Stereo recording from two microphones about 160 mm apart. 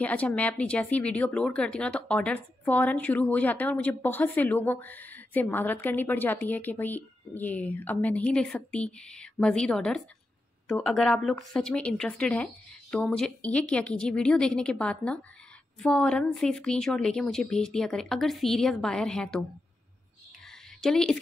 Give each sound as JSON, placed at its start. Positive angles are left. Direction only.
{"t": 0.0, "sound": "speech", "side_deg": 10}
{"t": 20.8, "sound": "speech", "side_deg": 5}